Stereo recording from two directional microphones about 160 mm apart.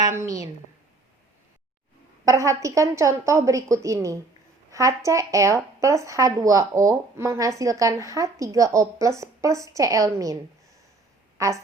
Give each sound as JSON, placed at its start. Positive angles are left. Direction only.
{"t": 0.0, "sound": "a woman's voice", "side_deg": -20}
{"t": 2.2, "sound": "speech", "side_deg": -20}
{"t": 11.3, "sound": "speech", "side_deg": -20}